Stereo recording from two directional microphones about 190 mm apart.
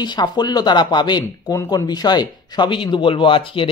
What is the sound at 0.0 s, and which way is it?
Speech, 20° left (ahead or behind).